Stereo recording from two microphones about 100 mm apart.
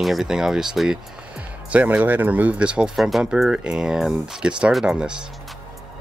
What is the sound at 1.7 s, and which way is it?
Speech, 15° right (ahead or behind).